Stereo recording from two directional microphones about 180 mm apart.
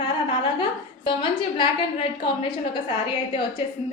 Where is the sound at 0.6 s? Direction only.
25° left (ahead or behind).